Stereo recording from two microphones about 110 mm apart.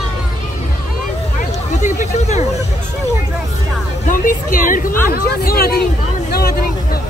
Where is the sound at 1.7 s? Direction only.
90° left.